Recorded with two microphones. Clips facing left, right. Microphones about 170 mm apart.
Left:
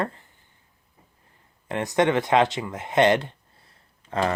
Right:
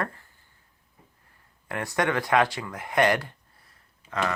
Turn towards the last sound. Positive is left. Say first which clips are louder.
# left 4 dB
turn(degrees=30)  # may be behind; listen again after turning